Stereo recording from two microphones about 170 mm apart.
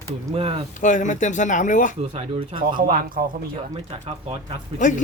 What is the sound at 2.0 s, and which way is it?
Speech, 35° right (ahead or behind).